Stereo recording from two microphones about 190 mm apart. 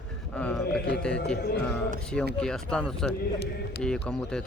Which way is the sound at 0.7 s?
65° left (ahead or behind).